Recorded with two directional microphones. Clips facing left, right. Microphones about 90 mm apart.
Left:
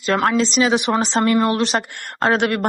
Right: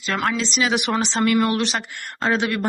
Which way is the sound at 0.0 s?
40° left (ahead or behind).